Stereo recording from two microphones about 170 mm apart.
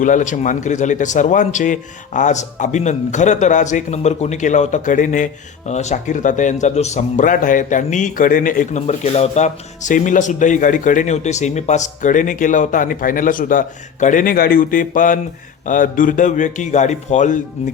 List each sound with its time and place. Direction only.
0.0 s speech: 50° left (ahead or behind)